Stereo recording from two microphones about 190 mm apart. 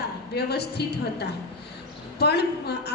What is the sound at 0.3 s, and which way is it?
Speech, 60° left (ahead or behind).